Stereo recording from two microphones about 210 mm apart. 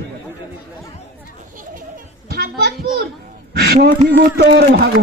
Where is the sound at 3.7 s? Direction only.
35° right (ahead or behind).